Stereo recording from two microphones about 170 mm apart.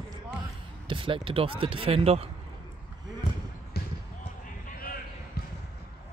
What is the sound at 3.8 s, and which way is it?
Basketball bounce, 65° left (ahead or behind).